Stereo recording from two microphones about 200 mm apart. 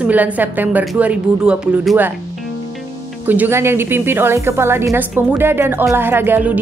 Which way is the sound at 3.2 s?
10° right (ahead or behind).